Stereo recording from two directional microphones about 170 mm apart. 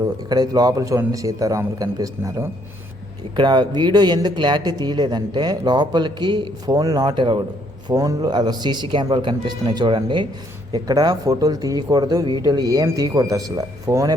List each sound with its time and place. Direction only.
0.3 s speech: 25° right (ahead or behind)